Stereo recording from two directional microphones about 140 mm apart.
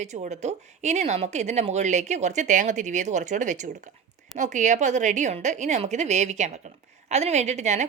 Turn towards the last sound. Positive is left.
turn(degrees=-55)  # may be behind; listen again after turning